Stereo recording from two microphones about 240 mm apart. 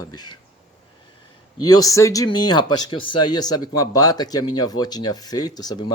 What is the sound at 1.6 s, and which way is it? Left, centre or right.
Speech, centre.